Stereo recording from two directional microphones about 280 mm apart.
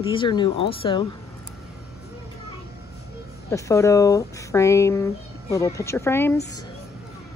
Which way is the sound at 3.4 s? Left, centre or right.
Centre.